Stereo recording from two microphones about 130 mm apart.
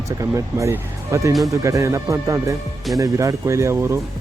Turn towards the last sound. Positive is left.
turn(degrees=-20)  # may be behind; listen again after turning